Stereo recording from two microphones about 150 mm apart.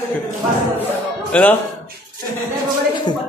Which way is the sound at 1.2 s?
10° left (ahead or behind).